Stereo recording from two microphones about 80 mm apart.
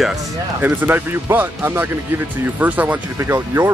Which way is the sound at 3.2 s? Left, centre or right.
Right.